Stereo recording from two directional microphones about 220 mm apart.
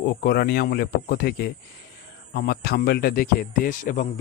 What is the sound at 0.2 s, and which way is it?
Speech, 45° left (ahead or behind).